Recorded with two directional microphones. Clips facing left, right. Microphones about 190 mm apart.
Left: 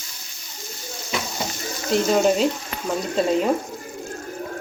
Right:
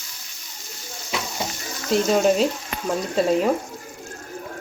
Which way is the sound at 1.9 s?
Centre (ahead or behind).